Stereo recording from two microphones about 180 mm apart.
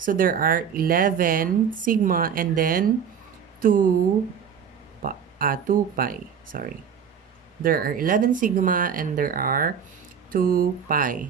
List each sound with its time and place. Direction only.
0.0 s speech: 50° right (ahead or behind)
5.0 s speech: 50° right (ahead or behind)